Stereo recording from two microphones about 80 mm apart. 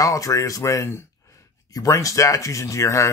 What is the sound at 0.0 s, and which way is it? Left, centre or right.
Speech, left.